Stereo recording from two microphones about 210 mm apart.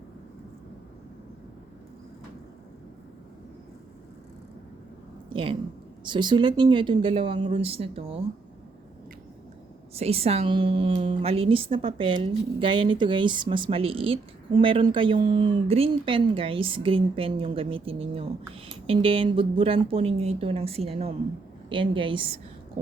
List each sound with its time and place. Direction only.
5.3 s a woman's voice: 25° right (ahead or behind)
9.9 s a woman's voice: 30° right (ahead or behind)